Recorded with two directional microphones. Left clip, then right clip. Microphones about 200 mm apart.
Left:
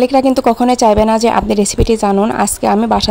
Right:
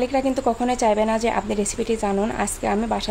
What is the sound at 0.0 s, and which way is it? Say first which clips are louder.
A woman's voice: left 10 dB; 50° left (ahead or behind).